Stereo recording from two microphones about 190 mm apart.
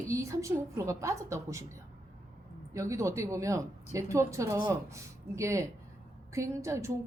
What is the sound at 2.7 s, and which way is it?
Speech, 15° right (ahead or behind).